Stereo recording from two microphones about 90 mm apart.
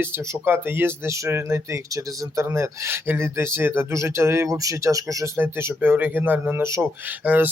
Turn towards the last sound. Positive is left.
turn(degrees=-20)  # may be behind; listen again after turning